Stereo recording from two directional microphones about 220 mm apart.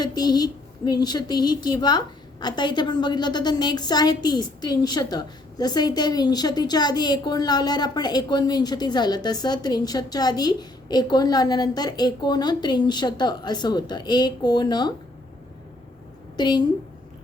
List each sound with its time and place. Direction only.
0.0 s a woman's voice: 20° left (ahead or behind)
16.4 s a woman's voice: 20° left (ahead or behind)